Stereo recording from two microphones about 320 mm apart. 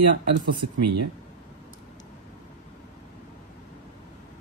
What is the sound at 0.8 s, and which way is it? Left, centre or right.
Speech, right.